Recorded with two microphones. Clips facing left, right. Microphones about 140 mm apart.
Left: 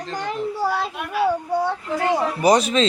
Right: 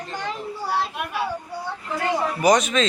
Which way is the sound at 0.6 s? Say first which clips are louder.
Left 3 dB; 90° left.